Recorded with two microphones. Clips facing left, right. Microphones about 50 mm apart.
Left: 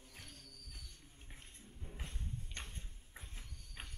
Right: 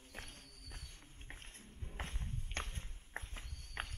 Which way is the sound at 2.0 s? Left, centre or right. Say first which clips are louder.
Right 7 dB; right.